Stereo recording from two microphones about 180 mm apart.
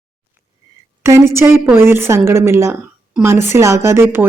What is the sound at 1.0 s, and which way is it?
A woman's voice, 15° right (ahead or behind).